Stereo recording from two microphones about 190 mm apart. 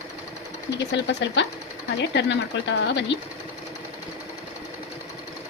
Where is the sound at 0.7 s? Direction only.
65° left (ahead or behind).